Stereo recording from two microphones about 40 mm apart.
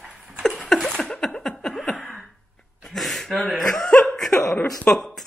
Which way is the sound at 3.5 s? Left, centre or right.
Centre.